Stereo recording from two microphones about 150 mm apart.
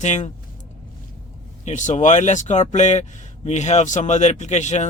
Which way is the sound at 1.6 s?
55° left (ahead or behind).